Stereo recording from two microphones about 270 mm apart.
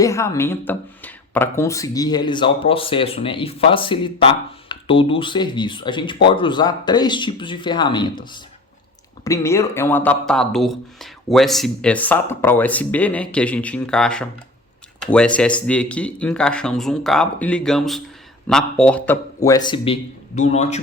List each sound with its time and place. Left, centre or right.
0.0 s speech: centre